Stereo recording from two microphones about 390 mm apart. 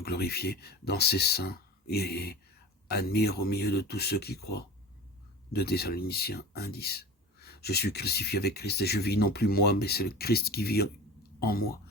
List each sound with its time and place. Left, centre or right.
0.0 s speech: left